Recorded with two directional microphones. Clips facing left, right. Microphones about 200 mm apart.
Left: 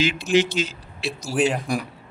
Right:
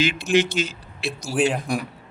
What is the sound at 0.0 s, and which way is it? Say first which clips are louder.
A man's voice: even; 55° right (ahead or behind).